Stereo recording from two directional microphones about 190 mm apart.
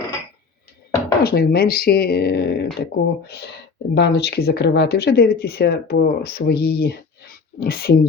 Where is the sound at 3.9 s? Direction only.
60° left (ahead or behind).